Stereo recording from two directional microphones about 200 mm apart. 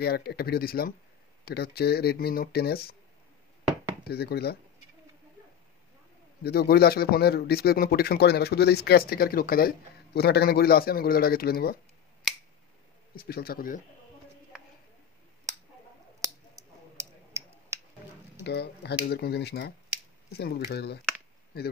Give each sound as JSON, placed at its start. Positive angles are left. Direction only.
{"t": 0.0, "sound": "speech", "side_deg": 50}
{"t": 4.1, "sound": "speech", "side_deg": 50}
{"t": 6.4, "sound": "speech", "side_deg": 50}
{"t": 13.1, "sound": "speech", "side_deg": 50}
{"t": 16.2, "sound": "clicking", "side_deg": -15}
{"t": 16.9, "sound": "a sound", "side_deg": -15}
{"t": 18.4, "sound": "speech", "side_deg": 55}